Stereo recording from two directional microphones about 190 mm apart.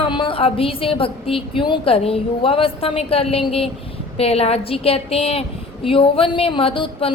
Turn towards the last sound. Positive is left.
turn(degrees=25)  # may be behind; listen again after turning